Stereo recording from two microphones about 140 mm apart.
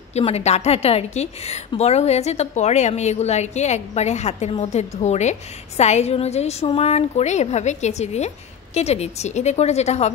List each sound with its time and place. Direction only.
0.1 s a woman's voice: 50° left (ahead or behind)